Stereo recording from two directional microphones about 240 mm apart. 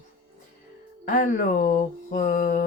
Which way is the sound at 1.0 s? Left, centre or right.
Left.